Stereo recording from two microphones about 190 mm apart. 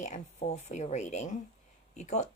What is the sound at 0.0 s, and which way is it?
Speech, 40° left (ahead or behind).